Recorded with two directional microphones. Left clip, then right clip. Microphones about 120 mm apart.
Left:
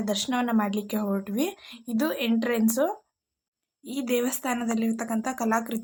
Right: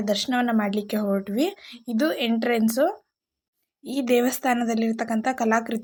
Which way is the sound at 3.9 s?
45° right (ahead or behind).